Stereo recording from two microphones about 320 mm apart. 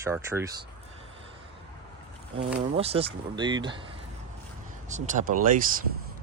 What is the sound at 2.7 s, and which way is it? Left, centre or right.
Speech, centre.